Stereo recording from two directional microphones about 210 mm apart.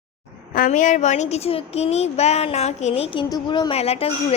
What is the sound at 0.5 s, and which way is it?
Child singing, 40° left (ahead or behind).